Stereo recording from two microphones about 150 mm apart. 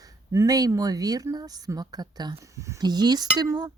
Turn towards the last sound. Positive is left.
turn(degrees=-25)  # may be behind; listen again after turning